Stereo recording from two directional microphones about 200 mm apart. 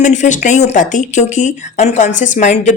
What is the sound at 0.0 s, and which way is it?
Speech, 35° left (ahead or behind).